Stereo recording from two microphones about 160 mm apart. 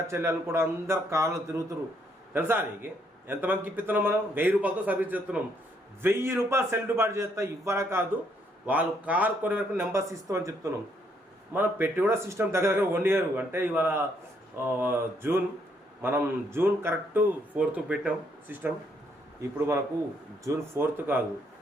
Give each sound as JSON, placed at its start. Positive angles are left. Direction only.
{"t": 0.1, "sound": "speech", "side_deg": -15}